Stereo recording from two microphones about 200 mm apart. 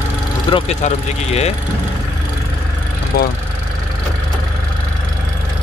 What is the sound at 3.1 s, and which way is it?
Speech, 50° left (ahead or behind).